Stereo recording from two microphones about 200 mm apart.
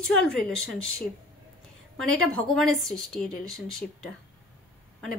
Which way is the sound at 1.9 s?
90° right.